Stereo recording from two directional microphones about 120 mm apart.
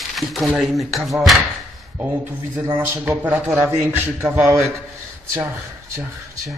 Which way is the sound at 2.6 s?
20° right (ahead or behind).